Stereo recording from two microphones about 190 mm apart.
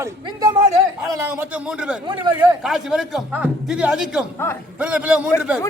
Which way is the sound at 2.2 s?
20° right (ahead or behind).